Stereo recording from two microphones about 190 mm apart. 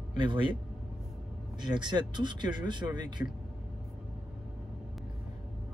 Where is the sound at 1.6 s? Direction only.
25° right (ahead or behind).